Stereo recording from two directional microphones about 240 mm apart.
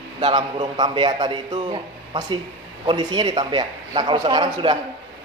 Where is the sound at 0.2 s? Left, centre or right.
Centre.